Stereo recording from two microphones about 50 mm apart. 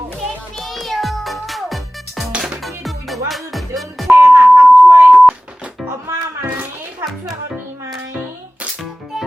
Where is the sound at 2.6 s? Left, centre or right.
Centre.